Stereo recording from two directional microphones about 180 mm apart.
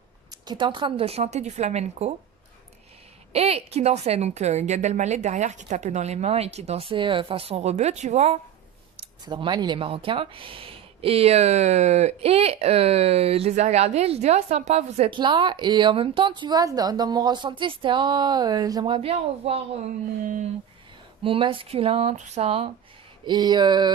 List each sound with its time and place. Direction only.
0.3 s a woman's voice: 25° right (ahead or behind)
3.3 s a woman's voice: 35° right (ahead or behind)
9.2 s speech: 25° right (ahead or behind)
18.9 s a woman's voice: 35° right (ahead or behind)
21.2 s a woman's voice: 30° right (ahead or behind)
23.2 s speech: 25° right (ahead or behind)